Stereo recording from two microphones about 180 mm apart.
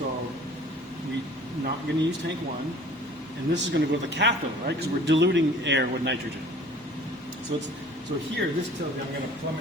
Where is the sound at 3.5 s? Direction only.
75° right (ahead or behind).